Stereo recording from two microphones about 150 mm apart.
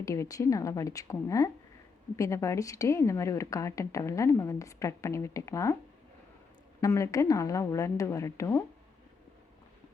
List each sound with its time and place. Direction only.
0.0 s a woman's voice: 20° left (ahead or behind)
6.8 s a woman's voice: 20° left (ahead or behind)